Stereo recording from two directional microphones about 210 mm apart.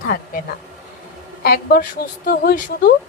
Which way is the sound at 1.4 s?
45° left (ahead or behind).